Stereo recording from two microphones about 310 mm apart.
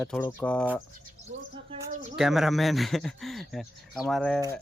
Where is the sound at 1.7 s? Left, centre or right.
Centre.